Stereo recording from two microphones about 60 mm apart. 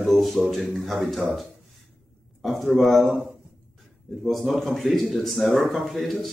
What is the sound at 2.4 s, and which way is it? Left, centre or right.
Speech, centre.